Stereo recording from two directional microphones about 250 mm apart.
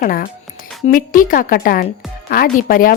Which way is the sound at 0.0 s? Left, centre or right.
Left.